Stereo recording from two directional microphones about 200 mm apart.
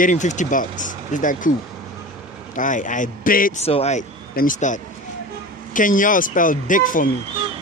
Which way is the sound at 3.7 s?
35° left (ahead or behind).